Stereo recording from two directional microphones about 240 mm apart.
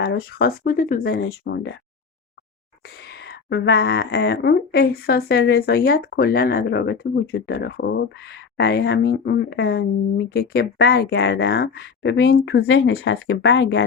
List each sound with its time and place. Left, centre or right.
0.0 s speech: left
3.0 s speech: left